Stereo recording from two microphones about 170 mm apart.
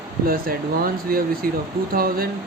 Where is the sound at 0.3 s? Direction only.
60° right (ahead or behind).